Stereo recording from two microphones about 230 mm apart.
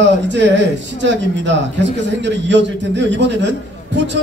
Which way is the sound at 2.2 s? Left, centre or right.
Right.